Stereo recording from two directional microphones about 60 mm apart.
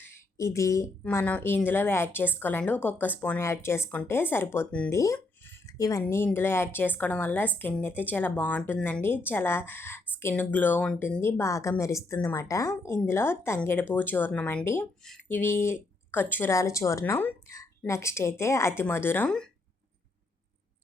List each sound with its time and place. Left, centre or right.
0.3 s a woman's voice: left
1.2 s speech: left
1.5 s speech: left
3.4 s a woman's voice: left
4.9 s a woman's voice: left
5.6 s a sound: left
6.2 s speech: left
10.3 s speech: left
11.2 s a woman's voice: left
13.1 s a woman's voice: left
14.6 s a woman's voice: left
16.5 s a woman's voice: left